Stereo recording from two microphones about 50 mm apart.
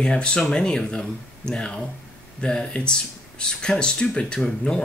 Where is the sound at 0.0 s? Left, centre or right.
Centre.